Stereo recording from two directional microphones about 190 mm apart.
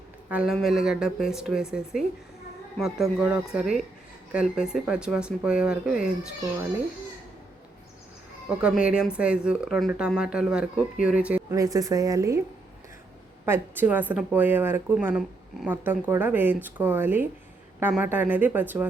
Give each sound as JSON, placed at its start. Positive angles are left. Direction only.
{"t": 0.3, "sound": "speech", "side_deg": -5}
{"t": 8.4, "sound": "speech", "side_deg": -5}
{"t": 11.5, "sound": "speech", "side_deg": -20}
{"t": 13.4, "sound": "speech", "side_deg": -10}